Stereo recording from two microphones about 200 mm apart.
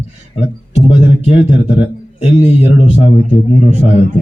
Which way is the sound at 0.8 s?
30° left (ahead or behind).